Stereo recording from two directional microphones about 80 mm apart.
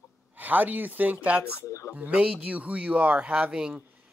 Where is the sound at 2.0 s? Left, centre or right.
Centre.